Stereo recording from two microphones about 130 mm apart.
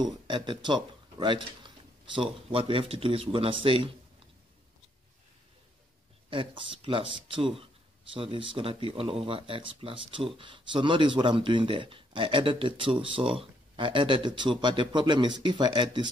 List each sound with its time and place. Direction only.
0.0 s speech: 35° right (ahead or behind)
6.3 s speech: 40° right (ahead or behind)